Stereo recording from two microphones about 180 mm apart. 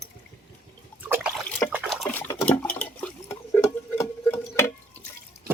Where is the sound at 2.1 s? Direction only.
10° left (ahead or behind).